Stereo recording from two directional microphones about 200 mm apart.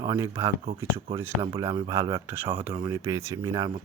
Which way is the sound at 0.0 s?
15° right (ahead or behind).